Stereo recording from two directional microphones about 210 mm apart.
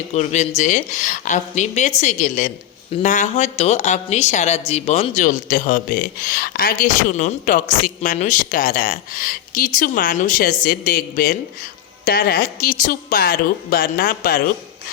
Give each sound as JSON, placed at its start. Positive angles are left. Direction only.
{"t": 0.1, "sound": "a woman's voice", "side_deg": 30}